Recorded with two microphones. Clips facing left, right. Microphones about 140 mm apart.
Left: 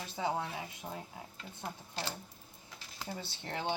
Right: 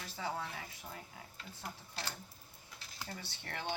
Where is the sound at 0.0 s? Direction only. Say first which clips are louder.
Left 5 dB; 20° left (ahead or behind).